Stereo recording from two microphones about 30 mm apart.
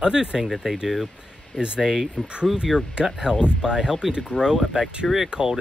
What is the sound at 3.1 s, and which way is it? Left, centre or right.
Speech, right.